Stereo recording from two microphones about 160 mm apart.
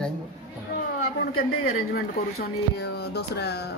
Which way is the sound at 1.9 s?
80° left.